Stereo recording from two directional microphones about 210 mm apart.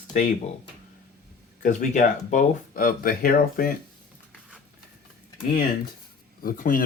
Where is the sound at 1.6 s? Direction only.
35° left (ahead or behind).